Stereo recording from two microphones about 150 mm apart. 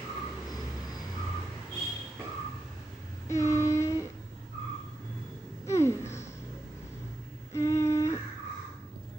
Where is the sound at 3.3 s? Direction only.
20° left (ahead or behind).